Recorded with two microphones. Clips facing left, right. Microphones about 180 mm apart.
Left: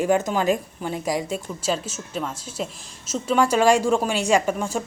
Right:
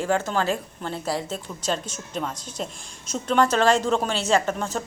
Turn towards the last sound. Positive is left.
turn(degrees=10)  # may be behind; listen again after turning